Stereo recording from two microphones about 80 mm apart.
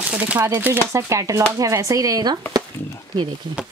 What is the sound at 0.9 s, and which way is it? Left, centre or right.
Speech, right.